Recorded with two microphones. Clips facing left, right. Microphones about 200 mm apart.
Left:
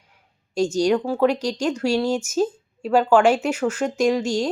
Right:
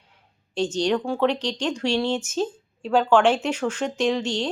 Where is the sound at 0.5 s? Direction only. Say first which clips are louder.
Left 4 dB; 10° left (ahead or behind).